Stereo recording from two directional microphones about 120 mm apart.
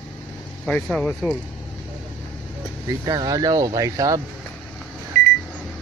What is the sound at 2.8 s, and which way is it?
Speech, 30° right (ahead or behind).